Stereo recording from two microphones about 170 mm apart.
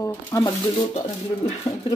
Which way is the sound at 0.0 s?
20° left (ahead or behind).